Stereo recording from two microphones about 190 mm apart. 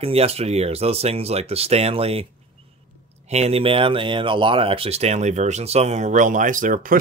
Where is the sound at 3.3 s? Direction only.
35° right (ahead or behind).